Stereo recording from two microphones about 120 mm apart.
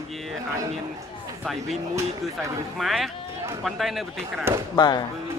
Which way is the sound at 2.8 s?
Centre (ahead or behind).